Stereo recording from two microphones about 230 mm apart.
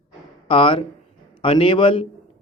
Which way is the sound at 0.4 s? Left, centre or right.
Left.